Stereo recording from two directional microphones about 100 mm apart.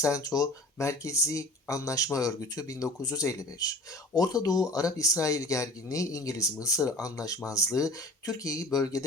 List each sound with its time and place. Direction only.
0.0 s speech: 35° left (ahead or behind)